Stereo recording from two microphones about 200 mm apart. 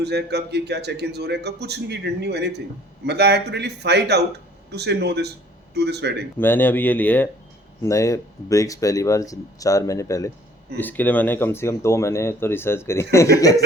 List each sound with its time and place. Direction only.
0.0 s speech: 55° right (ahead or behind)
6.4 s speech: 10° left (ahead or behind)